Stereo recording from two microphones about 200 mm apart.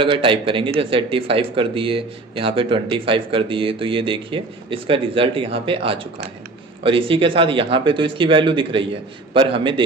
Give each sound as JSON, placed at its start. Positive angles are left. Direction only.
{"t": 0.0, "sound": "speech", "side_deg": -25}